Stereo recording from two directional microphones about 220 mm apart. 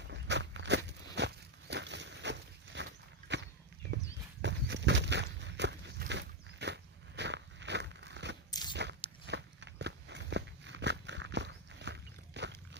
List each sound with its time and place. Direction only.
0.1 s a sound: 55° right (ahead or behind)
8.4 s biting: 20° left (ahead or behind)
8.7 s biting: 50° right (ahead or behind)